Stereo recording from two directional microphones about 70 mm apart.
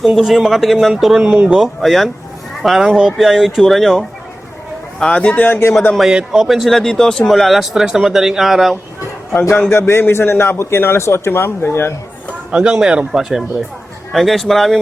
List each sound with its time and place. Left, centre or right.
0.0 s speech: centre
1.3 s a man's voice: centre
1.6 s speech: centre
4.9 s a man's voice: centre
6.0 s speech: centre
9.3 s a man's voice: left
12.5 s a man's voice: centre